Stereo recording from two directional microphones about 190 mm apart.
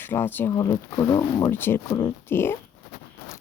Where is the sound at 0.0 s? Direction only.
10° left (ahead or behind).